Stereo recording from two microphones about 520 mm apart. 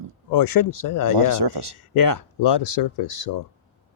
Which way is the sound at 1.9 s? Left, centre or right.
Left.